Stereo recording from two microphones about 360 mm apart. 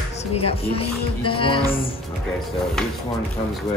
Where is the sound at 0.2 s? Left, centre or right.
Centre.